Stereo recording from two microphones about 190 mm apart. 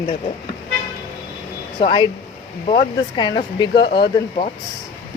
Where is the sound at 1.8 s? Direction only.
25° left (ahead or behind).